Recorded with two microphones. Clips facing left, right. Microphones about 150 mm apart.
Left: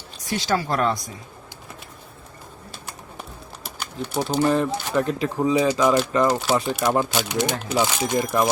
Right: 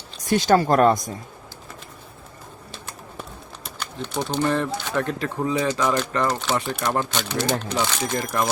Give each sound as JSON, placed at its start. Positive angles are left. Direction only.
{"t": 0.3, "sound": "speech", "side_deg": -50}
{"t": 3.6, "sound": "speech", "side_deg": 5}